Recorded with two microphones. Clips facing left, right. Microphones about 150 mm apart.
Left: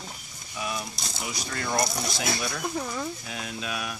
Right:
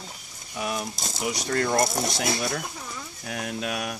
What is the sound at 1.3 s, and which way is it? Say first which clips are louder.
Speech: right 5 dB; 65° right (ahead or behind).